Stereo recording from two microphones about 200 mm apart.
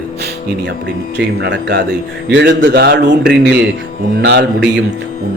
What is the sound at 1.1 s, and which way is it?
Speech, 60° right (ahead or behind).